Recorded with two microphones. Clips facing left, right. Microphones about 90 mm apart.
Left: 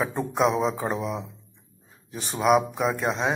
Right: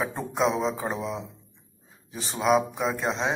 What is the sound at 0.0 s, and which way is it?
A man's voice, centre (ahead or behind).